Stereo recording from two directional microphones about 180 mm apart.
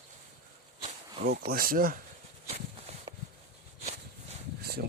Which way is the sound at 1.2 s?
55° right (ahead or behind).